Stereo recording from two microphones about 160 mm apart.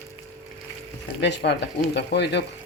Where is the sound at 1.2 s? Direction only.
90° left.